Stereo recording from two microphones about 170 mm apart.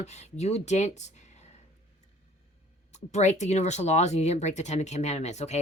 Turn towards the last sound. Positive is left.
turn(degrees=40)  # may be behind; listen again after turning